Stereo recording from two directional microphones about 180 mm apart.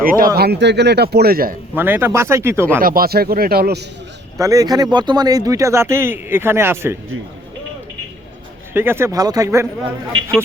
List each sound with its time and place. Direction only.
0.0 s speech: 50° right (ahead or behind)
0.3 s a man's voice: 65° right (ahead or behind)
1.7 s speech: 10° right (ahead or behind)
2.8 s a man's voice: 55° right (ahead or behind)
4.4 s speech: 20° right (ahead or behind)
8.7 s speech: 10° right (ahead or behind)